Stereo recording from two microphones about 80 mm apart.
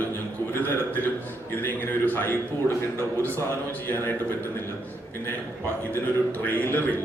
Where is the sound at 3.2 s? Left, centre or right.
Right.